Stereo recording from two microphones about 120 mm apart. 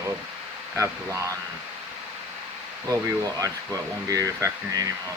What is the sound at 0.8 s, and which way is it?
Speech, 25° right (ahead or behind).